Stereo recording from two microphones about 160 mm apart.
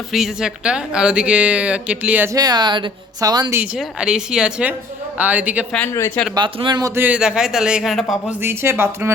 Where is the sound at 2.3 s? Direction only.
25° right (ahead or behind).